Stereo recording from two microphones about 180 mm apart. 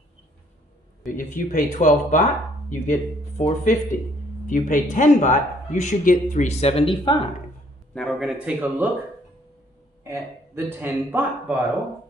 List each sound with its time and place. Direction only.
1.1 s speech: 45° left (ahead or behind); by 7.2 s 30° left (ahead or behind)
7.9 s speech: centre (ahead or behind)
10.0 s a man's voice: 15° right (ahead or behind)